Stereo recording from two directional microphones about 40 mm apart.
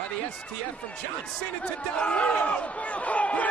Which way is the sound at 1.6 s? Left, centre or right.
Left.